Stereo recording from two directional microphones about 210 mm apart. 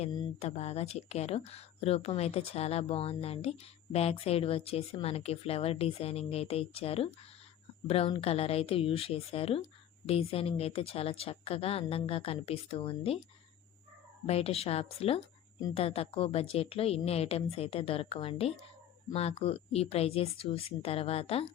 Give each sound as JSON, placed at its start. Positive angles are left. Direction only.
{"t": 0.3, "sound": "speech", "side_deg": 30}
{"t": 14.3, "sound": "speech", "side_deg": 30}